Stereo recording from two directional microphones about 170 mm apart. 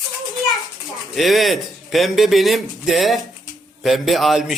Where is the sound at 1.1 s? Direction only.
Centre (ahead or behind).